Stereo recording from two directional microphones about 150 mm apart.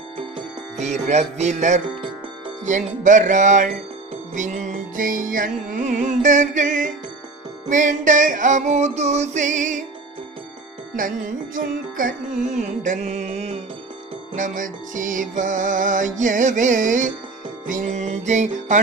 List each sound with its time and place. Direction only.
0.8 s music: 50° right (ahead or behind)
11.5 s music: 65° right (ahead or behind); by 13.6 s 45° right (ahead or behind)
14.3 s music: 60° right (ahead or behind)